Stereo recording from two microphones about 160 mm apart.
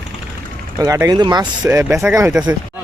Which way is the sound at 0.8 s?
20° right (ahead or behind).